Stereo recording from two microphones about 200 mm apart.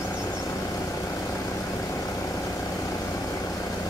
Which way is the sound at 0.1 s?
15° left (ahead or behind).